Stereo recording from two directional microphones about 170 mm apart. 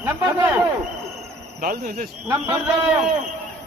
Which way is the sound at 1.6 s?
60° right (ahead or behind).